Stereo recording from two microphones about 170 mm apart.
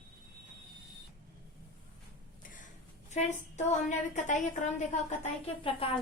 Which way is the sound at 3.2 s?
45° left (ahead or behind).